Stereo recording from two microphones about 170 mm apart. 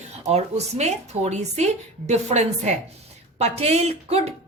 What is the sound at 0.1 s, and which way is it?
A woman's voice, 40° right (ahead or behind).